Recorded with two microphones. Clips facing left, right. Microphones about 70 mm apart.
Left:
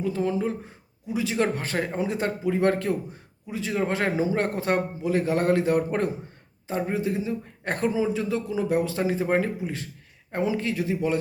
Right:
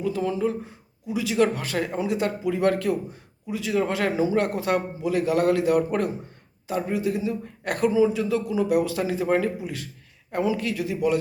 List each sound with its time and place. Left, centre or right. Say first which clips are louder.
0.0 s a man's voice: right 1 dB; left